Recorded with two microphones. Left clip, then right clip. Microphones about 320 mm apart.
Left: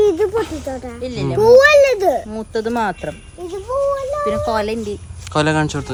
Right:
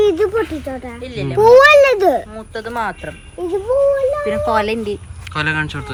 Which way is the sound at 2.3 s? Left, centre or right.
Left.